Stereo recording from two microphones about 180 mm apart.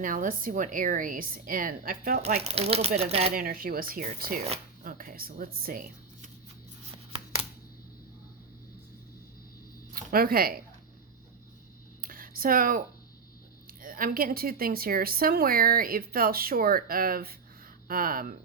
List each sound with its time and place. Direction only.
0.0 s speech: 50° right (ahead or behind)
2.2 s speech: 35° right (ahead or behind)
3.3 s speech: 55° right (ahead or behind)
4.4 s shuffling cards: 35° right (ahead or behind)
4.9 s a woman's voice: 50° right (ahead or behind)
9.9 s speech: 55° right (ahead or behind)
12.0 s a sound: 50° right (ahead or behind)
13.7 s speech: 50° right (ahead or behind)